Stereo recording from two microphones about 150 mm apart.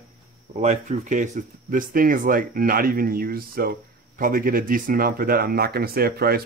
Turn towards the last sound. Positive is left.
turn(degrees=-90)